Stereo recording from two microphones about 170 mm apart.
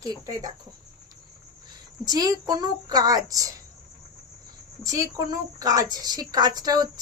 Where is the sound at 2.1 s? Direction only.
20° right (ahead or behind).